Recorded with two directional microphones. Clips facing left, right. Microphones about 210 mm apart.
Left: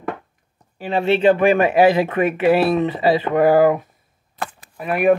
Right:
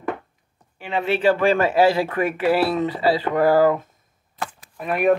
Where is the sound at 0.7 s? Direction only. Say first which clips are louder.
Left 5 dB; 35° left (ahead or behind).